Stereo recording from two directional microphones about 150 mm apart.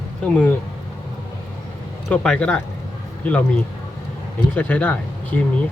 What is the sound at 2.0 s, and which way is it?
Speech, 5° left (ahead or behind).